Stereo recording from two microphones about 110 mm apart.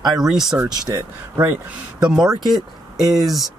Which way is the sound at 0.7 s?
35° right (ahead or behind).